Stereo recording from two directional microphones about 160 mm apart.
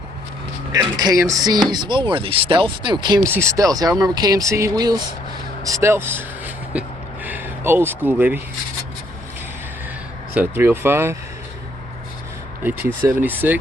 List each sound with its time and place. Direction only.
0.7 s speech: 25° right (ahead or behind)
10.3 s speech: 15° right (ahead or behind)
12.8 s speech: 15° right (ahead or behind)